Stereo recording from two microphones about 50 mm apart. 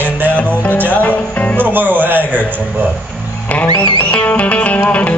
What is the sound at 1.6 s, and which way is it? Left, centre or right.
Speech, right.